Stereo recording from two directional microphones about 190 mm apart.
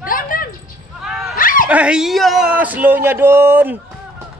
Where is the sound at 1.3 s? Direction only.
45° left (ahead or behind).